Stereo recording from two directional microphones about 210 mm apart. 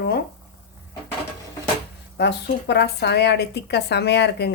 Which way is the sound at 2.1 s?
55° left (ahead or behind).